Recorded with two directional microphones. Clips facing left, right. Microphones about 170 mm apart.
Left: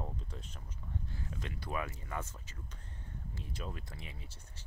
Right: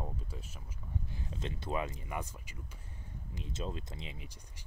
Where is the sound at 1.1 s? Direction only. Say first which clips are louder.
Right 2 dB; 25° right (ahead or behind).